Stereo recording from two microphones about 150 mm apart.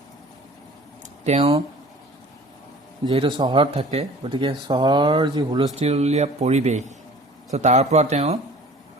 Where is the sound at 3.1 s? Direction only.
30° right (ahead or behind).